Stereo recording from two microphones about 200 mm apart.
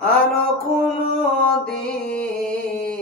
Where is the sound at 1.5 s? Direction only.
5° left (ahead or behind).